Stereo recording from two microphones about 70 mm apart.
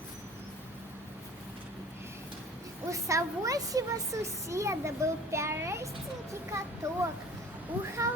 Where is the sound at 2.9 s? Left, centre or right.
Right.